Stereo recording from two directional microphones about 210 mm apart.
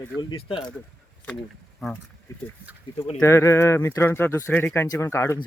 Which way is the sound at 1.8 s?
Centre (ahead or behind).